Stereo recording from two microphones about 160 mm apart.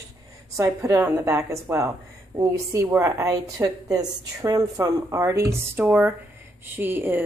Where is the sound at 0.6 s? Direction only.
20° right (ahead or behind).